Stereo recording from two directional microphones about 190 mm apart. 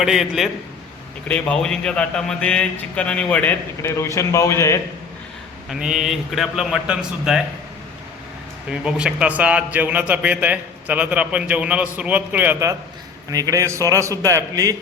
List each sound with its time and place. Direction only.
0.0 s a man's voice: centre (ahead or behind); by 4.8 s 15° left (ahead or behind)
5.6 s a man's voice: 5° right (ahead or behind)
8.7 s a man's voice: 5° right (ahead or behind)